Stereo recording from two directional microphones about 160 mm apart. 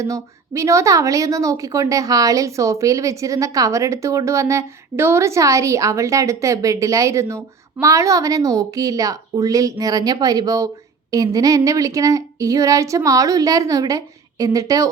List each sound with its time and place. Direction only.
0.0 s a woman's voice: 20° right (ahead or behind)